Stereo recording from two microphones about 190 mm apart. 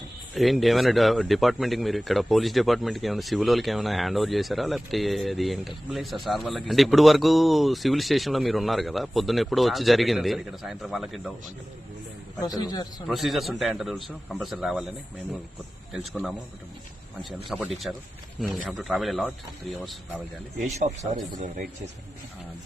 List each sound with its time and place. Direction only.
0.3 s speech: centre (ahead or behind)
12.5 s a man's voice: 20° left (ahead or behind)
13.1 s speech: centre (ahead or behind)
15.9 s speech: centre (ahead or behind)